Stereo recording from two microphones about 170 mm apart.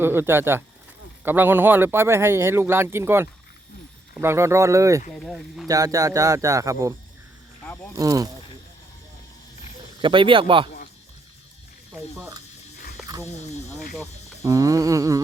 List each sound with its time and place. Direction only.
0.0 s speech: 15° right (ahead or behind)
5.1 s speech: centre (ahead or behind)
5.6 s speech: 20° right (ahead or behind)
7.9 s speech: 20° right (ahead or behind)
10.0 s speech: 30° right (ahead or behind)
12.1 s speech: 15° right (ahead or behind)
14.4 s speech: 20° right (ahead or behind)